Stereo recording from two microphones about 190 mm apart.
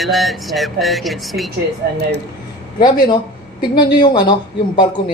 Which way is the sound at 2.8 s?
25° left (ahead or behind).